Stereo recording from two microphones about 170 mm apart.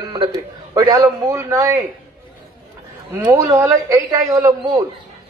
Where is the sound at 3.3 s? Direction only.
15° right (ahead or behind).